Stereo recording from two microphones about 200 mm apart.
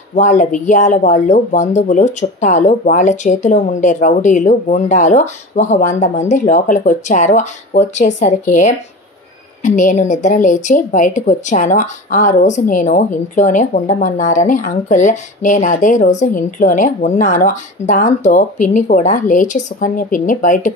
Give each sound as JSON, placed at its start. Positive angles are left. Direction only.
{"t": 0.1, "sound": "speech", "side_deg": 40}